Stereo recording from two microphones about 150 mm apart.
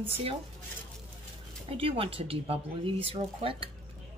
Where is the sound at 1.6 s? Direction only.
35° right (ahead or behind).